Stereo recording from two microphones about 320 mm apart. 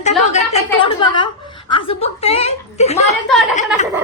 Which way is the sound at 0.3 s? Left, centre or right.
Centre.